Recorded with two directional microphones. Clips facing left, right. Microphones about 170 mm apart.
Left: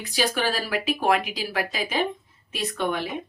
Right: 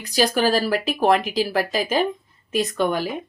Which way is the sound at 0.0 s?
40° right (ahead or behind).